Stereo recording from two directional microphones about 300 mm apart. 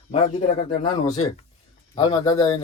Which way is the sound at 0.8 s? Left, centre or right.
Centre.